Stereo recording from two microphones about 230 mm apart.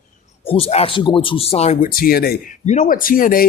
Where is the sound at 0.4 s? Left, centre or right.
Left.